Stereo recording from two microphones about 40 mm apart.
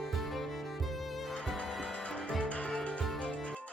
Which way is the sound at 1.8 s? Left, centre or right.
Left.